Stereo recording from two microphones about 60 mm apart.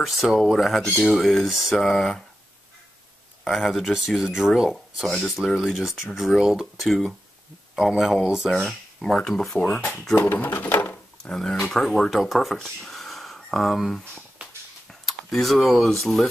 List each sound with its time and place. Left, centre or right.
0.0 s speech: centre
3.4 s speech: centre
8.5 s speech: centre
10.1 s speech: left
11.2 s speech: centre
12.6 s a sound: centre
14.9 s speech: centre